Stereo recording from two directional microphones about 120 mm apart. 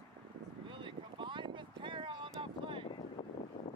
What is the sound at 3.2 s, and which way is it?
Boat, 40° left (ahead or behind).